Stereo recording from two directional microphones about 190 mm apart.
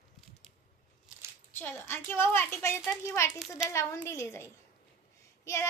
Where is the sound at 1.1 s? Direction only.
5° right (ahead or behind).